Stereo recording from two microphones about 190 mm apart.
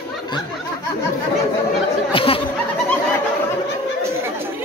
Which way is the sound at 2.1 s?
30° left (ahead or behind).